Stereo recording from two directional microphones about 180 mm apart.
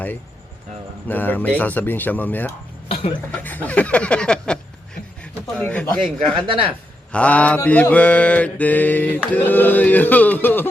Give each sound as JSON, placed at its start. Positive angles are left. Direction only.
{"t": 1.0, "sound": "mantra", "side_deg": 10}
{"t": 2.9, "sound": "speech", "side_deg": 30}
{"t": 3.4, "sound": "mantra", "side_deg": 10}
{"t": 6.3, "sound": "speech", "side_deg": -30}
{"t": 7.1, "sound": "mantra", "side_deg": 5}